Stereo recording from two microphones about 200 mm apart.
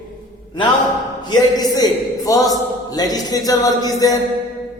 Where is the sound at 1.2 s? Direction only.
20° left (ahead or behind).